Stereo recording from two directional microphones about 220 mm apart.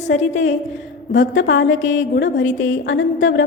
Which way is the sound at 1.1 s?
55° left (ahead or behind).